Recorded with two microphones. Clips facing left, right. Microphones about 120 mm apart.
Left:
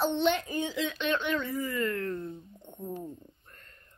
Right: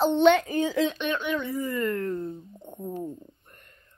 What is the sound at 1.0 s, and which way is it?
Speech, 10° right (ahead or behind).